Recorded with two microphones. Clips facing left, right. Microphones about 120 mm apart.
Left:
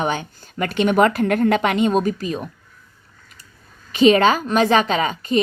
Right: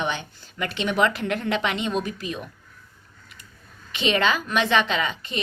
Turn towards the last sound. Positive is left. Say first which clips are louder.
# left 6 dB
turn(degrees=40)  # may be behind; listen again after turning